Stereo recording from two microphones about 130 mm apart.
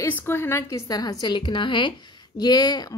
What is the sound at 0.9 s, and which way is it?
Speech, 30° left (ahead or behind).